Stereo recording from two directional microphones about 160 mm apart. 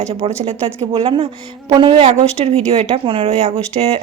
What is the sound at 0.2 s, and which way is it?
A woman's voice, 40° right (ahead or behind).